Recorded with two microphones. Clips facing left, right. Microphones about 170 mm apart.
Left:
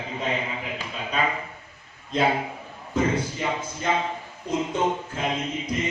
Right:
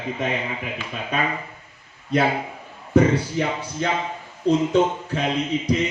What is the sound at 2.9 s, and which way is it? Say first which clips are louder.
A man's voice: right 7 dB; 75° right (ahead or behind).